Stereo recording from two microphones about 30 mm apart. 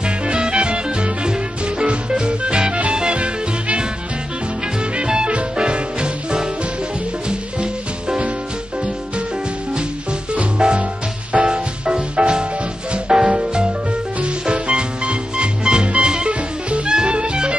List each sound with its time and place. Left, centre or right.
0.0 s music: right
5.0 s music: right
10.6 s music: right
14.4 s music: right